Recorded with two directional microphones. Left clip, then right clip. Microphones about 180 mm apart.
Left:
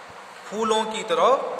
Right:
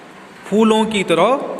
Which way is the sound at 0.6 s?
20° right (ahead or behind).